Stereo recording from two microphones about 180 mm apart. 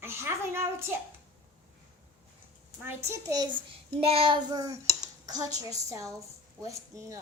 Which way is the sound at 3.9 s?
30° right (ahead or behind).